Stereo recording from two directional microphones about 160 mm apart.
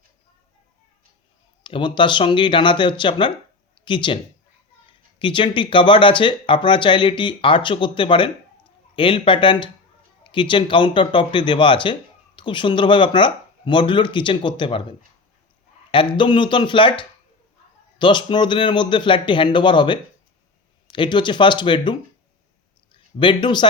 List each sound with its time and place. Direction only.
1.6 s a man's voice: 30° left (ahead or behind)